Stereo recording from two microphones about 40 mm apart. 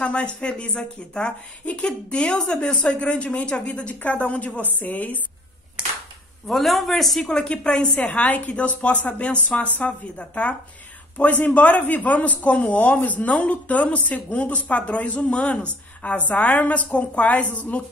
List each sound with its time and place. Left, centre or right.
0.0 s a woman's voice: left
5.8 s clapping: right
6.4 s speech: centre
7.2 s a woman's voice: left
8.3 s a woman's voice: left
11.5 s a woman's voice: left